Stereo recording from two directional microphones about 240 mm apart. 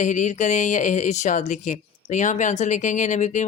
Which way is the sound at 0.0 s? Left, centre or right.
Left.